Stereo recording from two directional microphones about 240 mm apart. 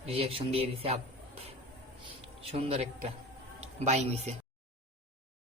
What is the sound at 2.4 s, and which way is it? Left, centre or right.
A woman's voice, right.